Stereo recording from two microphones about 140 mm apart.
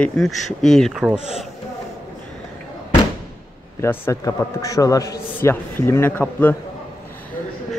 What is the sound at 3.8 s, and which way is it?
A man's voice, 20° left (ahead or behind).